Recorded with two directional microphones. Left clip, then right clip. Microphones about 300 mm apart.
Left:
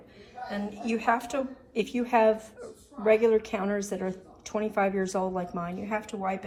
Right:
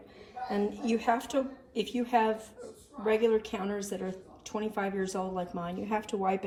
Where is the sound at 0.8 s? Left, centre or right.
Centre.